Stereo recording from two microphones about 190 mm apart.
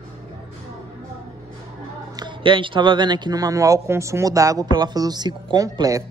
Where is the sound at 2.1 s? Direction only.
25° right (ahead or behind).